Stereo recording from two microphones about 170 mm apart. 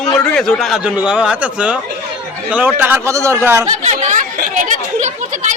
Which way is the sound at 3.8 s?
45° right (ahead or behind).